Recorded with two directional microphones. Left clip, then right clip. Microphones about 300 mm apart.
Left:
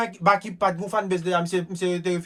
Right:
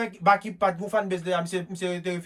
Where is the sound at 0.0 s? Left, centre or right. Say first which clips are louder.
Left 1 dB; centre.